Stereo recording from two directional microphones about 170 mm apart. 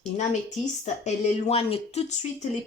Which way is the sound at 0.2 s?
40° left (ahead or behind).